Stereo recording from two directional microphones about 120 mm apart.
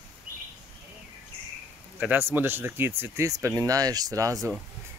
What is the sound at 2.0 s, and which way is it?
Speech, 15° right (ahead or behind).